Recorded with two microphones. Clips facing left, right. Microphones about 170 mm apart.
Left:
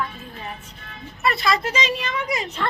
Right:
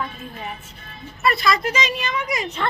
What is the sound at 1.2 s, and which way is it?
A woman's voice, 25° left (ahead or behind).